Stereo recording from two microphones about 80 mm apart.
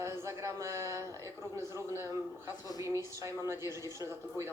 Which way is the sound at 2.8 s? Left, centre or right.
Right.